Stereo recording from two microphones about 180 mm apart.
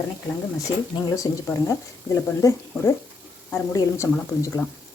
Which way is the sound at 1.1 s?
20° left (ahead or behind).